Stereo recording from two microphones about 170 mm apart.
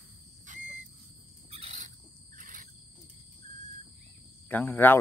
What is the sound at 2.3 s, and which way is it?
Cricket, 50° right (ahead or behind).